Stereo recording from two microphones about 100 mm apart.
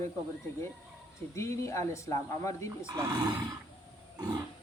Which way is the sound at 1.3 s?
30° left (ahead or behind).